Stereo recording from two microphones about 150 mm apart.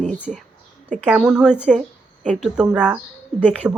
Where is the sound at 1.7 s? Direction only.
55° right (ahead or behind).